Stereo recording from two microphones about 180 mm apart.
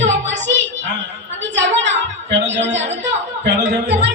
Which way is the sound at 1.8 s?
80° right.